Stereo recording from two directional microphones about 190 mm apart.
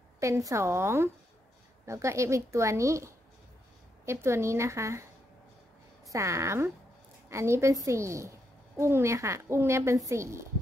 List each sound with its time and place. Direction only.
0.2 s speech: 15° right (ahead or behind)
6.0 s speech: 15° right (ahead or behind)